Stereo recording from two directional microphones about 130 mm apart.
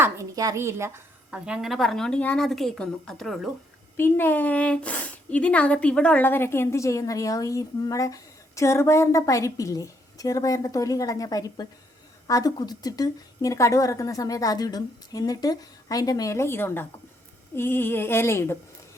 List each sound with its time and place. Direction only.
0.0 s a woman's voice: 25° right (ahead or behind)
1.5 s speech: 5° right (ahead or behind)
3.9 s speech: 15° left (ahead or behind)